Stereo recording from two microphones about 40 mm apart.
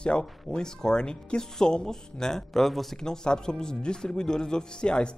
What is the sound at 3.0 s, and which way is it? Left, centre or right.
Speech, centre.